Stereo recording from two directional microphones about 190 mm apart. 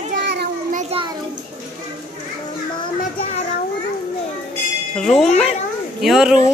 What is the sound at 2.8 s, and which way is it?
Children playing, 30° left (ahead or behind).